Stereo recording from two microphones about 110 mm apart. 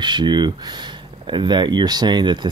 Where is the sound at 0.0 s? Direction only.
45° right (ahead or behind).